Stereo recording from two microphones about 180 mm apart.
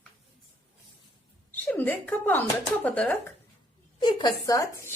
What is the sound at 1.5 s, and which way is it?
Speech, 10° left (ahead or behind).